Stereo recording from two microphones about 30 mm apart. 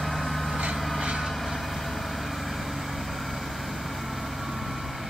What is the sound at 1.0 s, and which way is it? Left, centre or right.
Vehicle, right.